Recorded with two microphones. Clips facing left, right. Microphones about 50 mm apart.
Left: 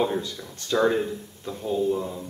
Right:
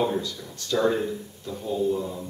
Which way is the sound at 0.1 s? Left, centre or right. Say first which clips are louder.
Even; left.